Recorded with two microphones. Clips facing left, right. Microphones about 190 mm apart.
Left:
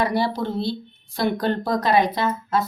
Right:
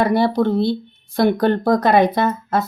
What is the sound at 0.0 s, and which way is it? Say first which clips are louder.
Speech: right 6 dB; 55° right (ahead or behind).